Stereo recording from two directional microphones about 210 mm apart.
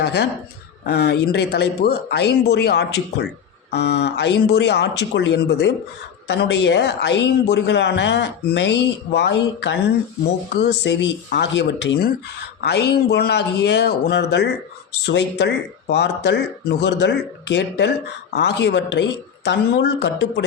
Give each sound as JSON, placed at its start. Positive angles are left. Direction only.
{"t": 0.0, "sound": "a man's voice", "side_deg": 50}